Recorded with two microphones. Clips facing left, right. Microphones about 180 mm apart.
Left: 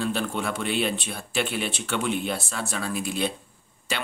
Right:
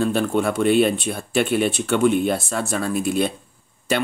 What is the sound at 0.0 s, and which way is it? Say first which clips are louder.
Speech: right 8 dB; 50° right (ahead or behind).